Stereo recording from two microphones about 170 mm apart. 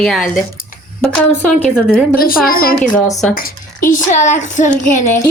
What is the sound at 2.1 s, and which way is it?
Speech, 60° left (ahead or behind).